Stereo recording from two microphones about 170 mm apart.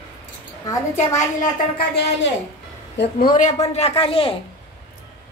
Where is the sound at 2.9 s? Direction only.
85° left.